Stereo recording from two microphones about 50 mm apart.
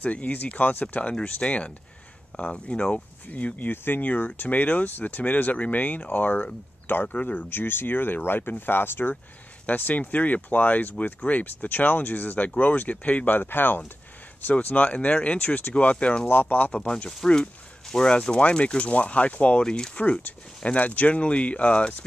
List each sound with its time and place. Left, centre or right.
0.0 s speech: left
9.7 s speech: left
16.8 s speech: centre
19.6 s speech: centre
20.0 s speech: left